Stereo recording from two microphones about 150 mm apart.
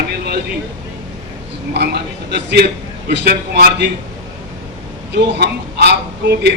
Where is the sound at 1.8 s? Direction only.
90° right.